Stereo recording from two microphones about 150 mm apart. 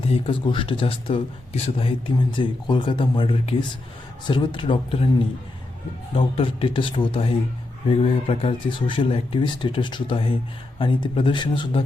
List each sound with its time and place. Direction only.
0.0 s speech: 35° left (ahead or behind)
6.1 s speech: 35° left (ahead or behind)